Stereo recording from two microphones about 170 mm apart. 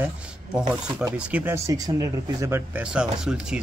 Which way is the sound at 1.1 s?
10° right (ahead or behind).